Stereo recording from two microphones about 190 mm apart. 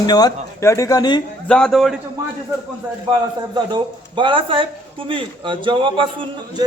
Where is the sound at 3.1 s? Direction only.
25° right (ahead or behind).